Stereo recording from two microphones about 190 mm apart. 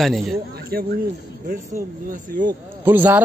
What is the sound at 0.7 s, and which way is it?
Speech, 55° right (ahead or behind).